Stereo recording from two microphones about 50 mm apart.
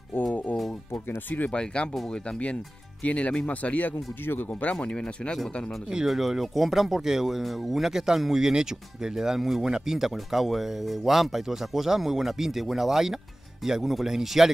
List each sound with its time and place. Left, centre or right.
1.0 s speech: left
1.5 s speech: centre
4.2 s speech: left
4.5 s speech: left
5.9 s speech: centre